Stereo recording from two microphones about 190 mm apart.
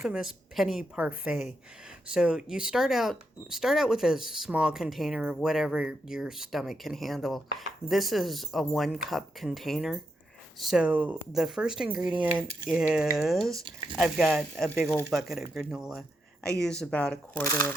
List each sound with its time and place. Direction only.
0.0 s speech: 5° right (ahead or behind); by 17.7 s 15° left (ahead or behind)